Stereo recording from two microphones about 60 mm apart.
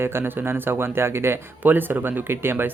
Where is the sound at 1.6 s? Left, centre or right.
Right.